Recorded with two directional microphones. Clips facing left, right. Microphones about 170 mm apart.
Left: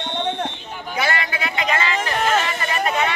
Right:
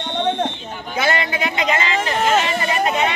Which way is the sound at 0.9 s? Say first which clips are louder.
Right 3 dB; 20° right (ahead or behind).